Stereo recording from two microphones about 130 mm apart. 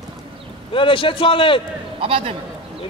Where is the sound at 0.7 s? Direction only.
40° left (ahead or behind).